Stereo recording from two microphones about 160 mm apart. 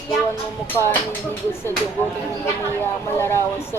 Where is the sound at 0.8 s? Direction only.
10° left (ahead or behind).